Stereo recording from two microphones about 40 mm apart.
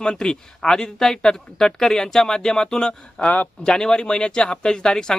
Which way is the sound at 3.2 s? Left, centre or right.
Left.